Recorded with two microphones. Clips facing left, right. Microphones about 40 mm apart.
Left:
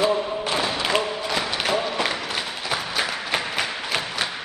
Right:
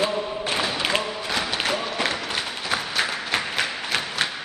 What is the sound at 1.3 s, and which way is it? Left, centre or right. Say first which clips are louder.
Crowd: left 1 dB; centre.